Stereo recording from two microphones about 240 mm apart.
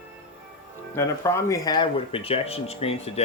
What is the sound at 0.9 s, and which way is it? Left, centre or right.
Speech, centre.